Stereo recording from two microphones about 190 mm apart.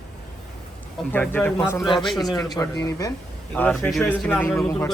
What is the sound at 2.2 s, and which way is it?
Speech, 20° left (ahead or behind).